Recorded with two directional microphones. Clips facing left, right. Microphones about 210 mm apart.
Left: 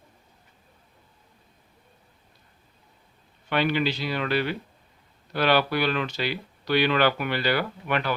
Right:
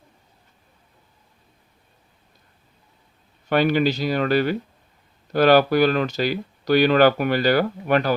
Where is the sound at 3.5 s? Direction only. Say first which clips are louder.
Right 6 dB; 45° right (ahead or behind).